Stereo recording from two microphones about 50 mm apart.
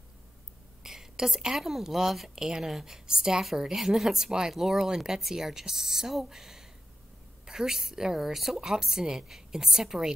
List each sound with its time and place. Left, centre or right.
0.8 s a woman's voice: centre